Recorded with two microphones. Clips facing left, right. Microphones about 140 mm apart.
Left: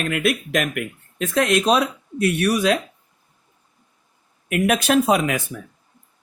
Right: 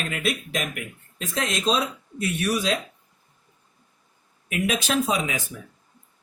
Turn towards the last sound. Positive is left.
turn(degrees=60)  # may be behind; listen again after turning